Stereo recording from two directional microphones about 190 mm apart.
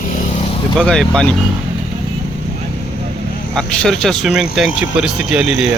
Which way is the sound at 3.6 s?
5° left (ahead or behind).